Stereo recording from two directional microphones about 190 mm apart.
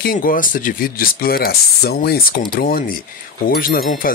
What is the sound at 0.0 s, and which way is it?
Speech, 50° left (ahead or behind).